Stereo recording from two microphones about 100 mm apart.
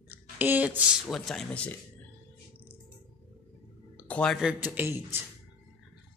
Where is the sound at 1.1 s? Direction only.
Centre (ahead or behind).